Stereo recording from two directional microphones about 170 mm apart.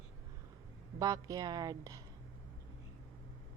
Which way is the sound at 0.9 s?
20° right (ahead or behind).